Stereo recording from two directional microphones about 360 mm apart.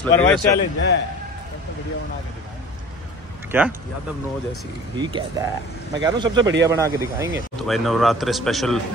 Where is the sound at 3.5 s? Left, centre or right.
Centre.